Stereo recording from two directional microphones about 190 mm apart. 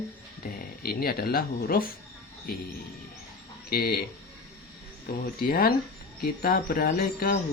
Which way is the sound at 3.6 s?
55° left (ahead or behind).